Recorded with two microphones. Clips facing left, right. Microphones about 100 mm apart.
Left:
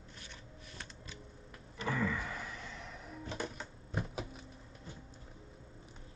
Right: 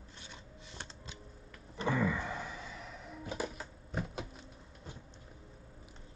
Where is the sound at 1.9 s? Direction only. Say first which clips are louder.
Right 3 dB; 20° right (ahead or behind).